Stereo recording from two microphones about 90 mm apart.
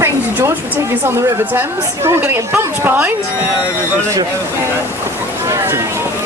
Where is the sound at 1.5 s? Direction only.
25° right (ahead or behind).